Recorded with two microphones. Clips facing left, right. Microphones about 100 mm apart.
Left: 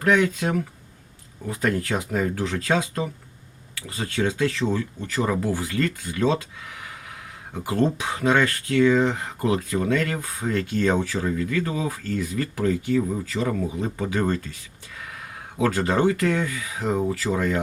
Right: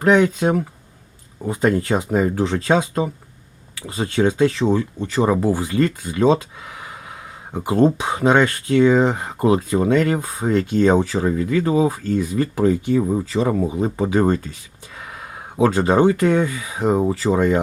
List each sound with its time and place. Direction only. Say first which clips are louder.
0.0 s speech: right 5 dB; 25° right (ahead or behind)